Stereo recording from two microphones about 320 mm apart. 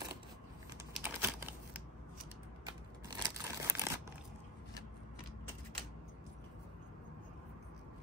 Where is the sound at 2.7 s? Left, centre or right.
Centre.